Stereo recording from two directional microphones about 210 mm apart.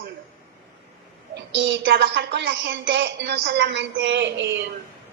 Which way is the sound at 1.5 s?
60° right (ahead or behind).